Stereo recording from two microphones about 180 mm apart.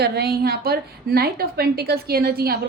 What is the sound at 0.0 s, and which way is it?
A woman's voice, 60° right (ahead or behind).